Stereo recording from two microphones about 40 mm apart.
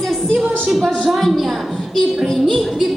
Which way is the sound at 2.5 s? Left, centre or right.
Centre.